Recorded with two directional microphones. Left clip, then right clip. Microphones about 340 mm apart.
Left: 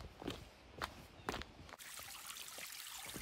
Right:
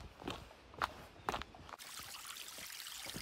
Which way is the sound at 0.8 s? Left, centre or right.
Centre.